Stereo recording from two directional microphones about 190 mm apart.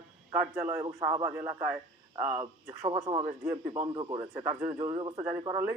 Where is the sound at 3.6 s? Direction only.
25° right (ahead or behind).